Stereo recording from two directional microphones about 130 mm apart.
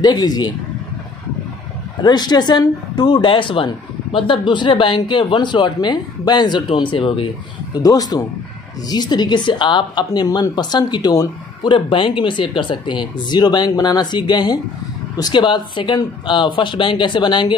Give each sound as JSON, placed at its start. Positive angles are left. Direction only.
{"t": 0.0, "sound": "a woman's voice", "side_deg": 30}
{"t": 2.0, "sound": "a woman's voice", "side_deg": 30}
{"t": 7.7, "sound": "a man's voice", "side_deg": 30}